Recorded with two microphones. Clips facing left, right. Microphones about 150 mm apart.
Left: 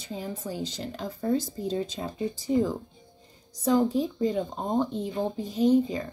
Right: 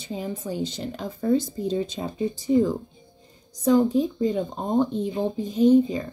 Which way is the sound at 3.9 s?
20° right (ahead or behind).